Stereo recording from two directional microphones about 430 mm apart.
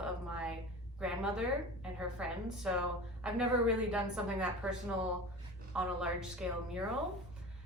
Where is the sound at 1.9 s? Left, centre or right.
Centre.